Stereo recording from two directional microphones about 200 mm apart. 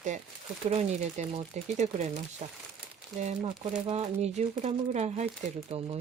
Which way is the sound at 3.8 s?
30° right (ahead or behind).